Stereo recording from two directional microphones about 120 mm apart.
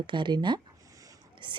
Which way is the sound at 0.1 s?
40° right (ahead or behind).